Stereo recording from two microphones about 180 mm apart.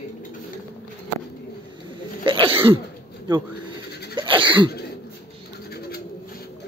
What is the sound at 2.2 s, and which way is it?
Sneeze, 30° right (ahead or behind).